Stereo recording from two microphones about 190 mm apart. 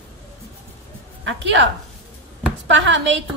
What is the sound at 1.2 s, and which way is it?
Speech, 75° right (ahead or behind).